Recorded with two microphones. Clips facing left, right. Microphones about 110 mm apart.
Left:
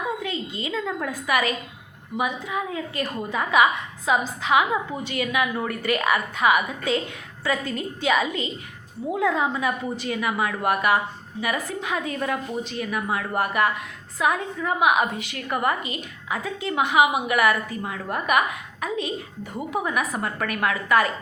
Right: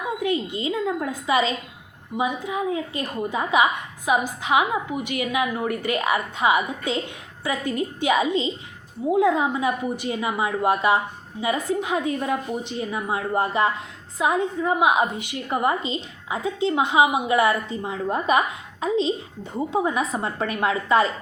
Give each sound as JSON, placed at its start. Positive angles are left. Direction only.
{"t": 0.2, "sound": "a woman's voice", "side_deg": -20}